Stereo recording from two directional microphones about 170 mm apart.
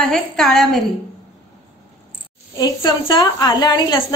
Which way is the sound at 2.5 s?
25° left (ahead or behind).